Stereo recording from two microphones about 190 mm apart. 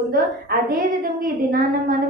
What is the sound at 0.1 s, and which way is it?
A woman's voice, 50° right (ahead or behind).